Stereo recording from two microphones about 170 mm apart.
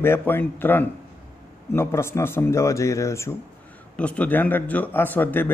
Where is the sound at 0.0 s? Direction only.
10° left (ahead or behind).